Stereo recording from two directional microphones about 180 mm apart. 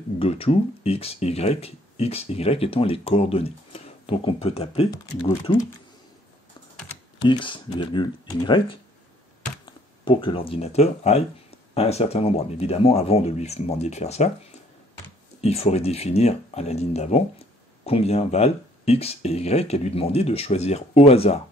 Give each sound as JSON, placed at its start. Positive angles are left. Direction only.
{"t": 0.2, "sound": "speech", "side_deg": 35}
{"t": 5.2, "sound": "speech", "side_deg": 25}
{"t": 7.2, "sound": "speech", "side_deg": 30}